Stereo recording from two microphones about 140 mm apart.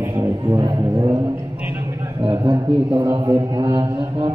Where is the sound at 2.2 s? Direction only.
35° right (ahead or behind).